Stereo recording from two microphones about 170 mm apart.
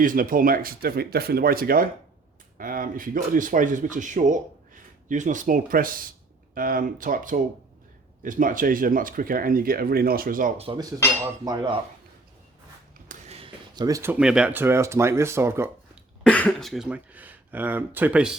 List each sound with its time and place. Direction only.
0.0 s speech: 55° right (ahead or behind)
10.6 s speech: 30° right (ahead or behind)
11.2 s cutlery: 20° right (ahead or behind)
13.1 s a sound: 40° right (ahead or behind)
13.7 s cutlery: 20° right (ahead or behind)
14.2 s speech: 5° right (ahead or behind)
16.2 s speech: 5° left (ahead or behind)